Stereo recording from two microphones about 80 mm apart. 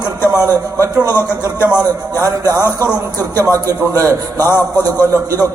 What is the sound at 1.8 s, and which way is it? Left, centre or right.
Speech, right.